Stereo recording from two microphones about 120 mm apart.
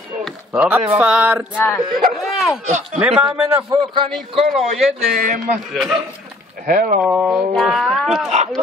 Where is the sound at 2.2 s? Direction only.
Centre (ahead or behind).